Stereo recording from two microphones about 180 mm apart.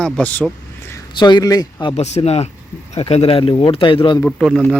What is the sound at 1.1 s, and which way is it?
Speech, 25° left (ahead or behind).